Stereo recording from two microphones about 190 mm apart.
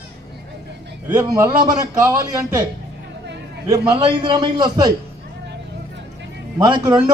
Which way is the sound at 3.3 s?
65° right (ahead or behind).